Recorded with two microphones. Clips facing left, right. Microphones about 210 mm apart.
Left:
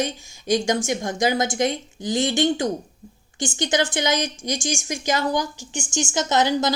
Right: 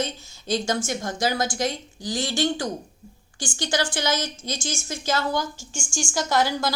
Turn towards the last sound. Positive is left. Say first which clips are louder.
# left 3 dB
turn(degrees=20)  # may be behind; listen again after turning